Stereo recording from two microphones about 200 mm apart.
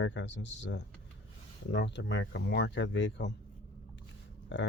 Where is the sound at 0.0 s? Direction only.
65° left (ahead or behind).